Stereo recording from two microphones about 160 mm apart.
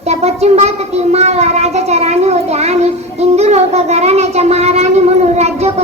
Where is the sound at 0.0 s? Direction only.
40° right (ahead or behind).